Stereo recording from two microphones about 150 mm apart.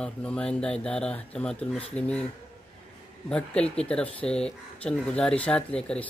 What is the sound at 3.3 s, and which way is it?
Speech, 5° left (ahead or behind).